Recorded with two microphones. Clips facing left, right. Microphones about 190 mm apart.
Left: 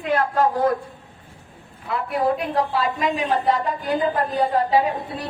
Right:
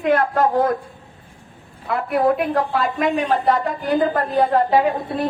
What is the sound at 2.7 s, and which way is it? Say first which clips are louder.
A woman's voice: right 3 dB; 50° right (ahead or behind).